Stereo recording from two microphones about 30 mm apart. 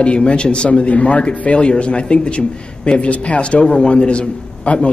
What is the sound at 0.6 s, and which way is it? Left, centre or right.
Speech, left.